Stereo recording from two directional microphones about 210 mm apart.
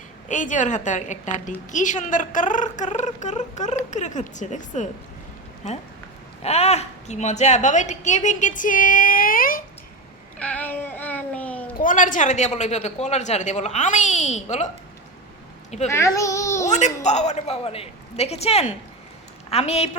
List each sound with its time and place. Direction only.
0.3 s a woman's voice: 35° left (ahead or behind)
6.4 s a woman's voice: 30° left (ahead or behind)
10.3 s child singing: 5° left (ahead or behind)
11.8 s a woman's voice: 40° left (ahead or behind)
15.9 s a child's voice: 15° left (ahead or behind)
16.6 s a woman's voice: 35° left (ahead or behind)